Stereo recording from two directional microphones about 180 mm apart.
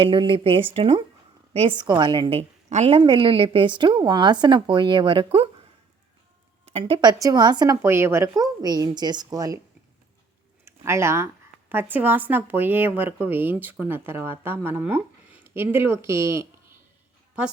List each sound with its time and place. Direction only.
0.0 s speech: 30° right (ahead or behind)
3.0 s speech: 25° right (ahead or behind)
6.7 s speech: 30° right (ahead or behind)
10.7 s speech: 15° right (ahead or behind)